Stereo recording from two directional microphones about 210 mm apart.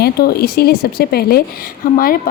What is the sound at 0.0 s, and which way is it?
Speech, 50° left (ahead or behind).